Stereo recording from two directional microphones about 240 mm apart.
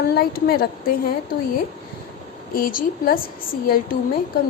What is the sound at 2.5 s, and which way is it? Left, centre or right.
Speech, left.